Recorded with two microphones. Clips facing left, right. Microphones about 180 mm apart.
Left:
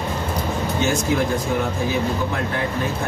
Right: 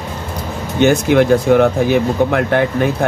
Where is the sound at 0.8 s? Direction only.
70° right (ahead or behind).